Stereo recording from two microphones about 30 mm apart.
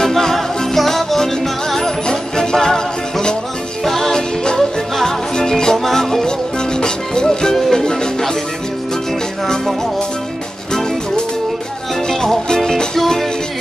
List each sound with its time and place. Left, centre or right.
0.1 s music: centre
2.0 s music: left
5.9 s music: centre
6.2 s music: left
12.1 s music: centre